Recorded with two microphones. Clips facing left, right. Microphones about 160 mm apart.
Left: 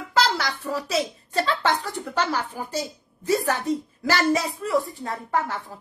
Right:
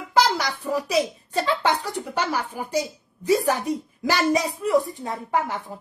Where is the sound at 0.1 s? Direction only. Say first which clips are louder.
Right 2 dB; 15° right (ahead or behind).